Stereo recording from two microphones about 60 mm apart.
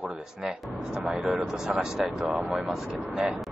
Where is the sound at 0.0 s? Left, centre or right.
Centre.